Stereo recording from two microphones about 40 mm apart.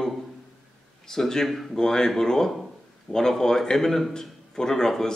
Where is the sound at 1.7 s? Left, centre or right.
Centre.